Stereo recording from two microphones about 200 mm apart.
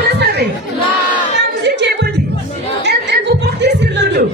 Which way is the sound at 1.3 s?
60° right (ahead or behind).